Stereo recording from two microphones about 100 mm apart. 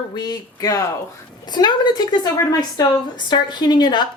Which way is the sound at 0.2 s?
40° left (ahead or behind).